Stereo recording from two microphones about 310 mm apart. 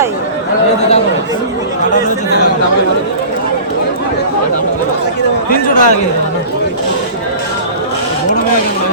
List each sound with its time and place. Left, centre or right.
5.5 s speech: left